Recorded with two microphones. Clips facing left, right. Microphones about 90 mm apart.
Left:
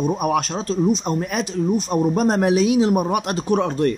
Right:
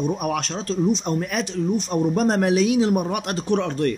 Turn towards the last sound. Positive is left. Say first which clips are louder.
# left 3 dB
turn(degrees=15)  # may be behind; listen again after turning